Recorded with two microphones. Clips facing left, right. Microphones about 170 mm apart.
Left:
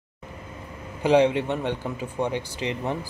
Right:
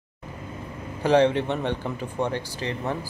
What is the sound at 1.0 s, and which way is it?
Speech, 15° left (ahead or behind).